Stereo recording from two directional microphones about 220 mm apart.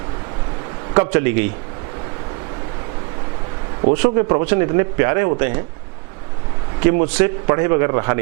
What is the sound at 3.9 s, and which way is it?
A man's voice, 15° right (ahead or behind).